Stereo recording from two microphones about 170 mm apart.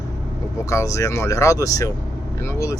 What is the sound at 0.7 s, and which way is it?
Speech, 15° left (ahead or behind).